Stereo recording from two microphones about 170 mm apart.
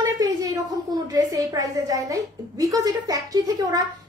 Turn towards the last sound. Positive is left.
turn(degrees=-20)  # may be behind; listen again after turning